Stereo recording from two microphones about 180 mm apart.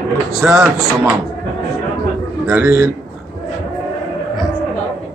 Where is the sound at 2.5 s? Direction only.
15° right (ahead or behind).